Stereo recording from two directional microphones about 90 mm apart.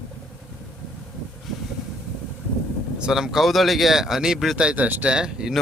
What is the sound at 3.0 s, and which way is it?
Speech, 5° right (ahead or behind).